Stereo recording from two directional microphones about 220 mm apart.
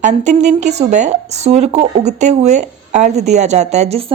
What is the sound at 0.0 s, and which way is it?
Speech, 30° right (ahead or behind).